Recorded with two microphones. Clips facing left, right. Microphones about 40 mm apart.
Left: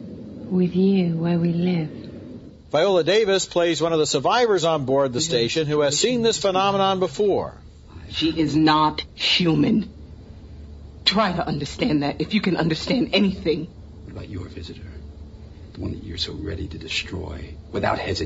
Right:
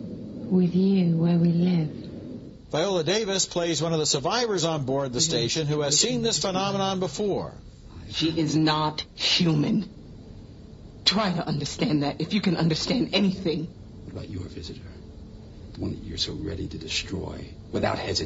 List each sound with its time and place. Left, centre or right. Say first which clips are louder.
0.5 s a man's voice: left 3 dB; left
11.1 s a man's voice: left 4 dB; left